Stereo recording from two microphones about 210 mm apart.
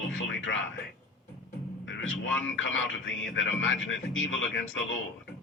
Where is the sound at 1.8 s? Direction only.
65° left (ahead or behind).